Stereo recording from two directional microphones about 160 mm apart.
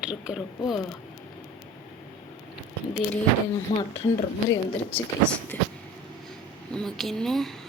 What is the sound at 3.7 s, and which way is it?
Speech, 45° left (ahead or behind).